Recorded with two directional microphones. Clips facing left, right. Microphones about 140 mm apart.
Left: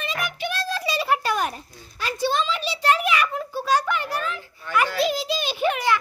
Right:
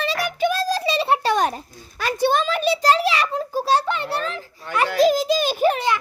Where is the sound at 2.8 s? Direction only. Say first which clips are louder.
Left 1 dB; 30° right (ahead or behind).